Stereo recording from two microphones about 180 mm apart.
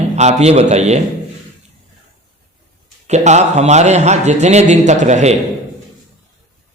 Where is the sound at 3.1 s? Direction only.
40° right (ahead or behind).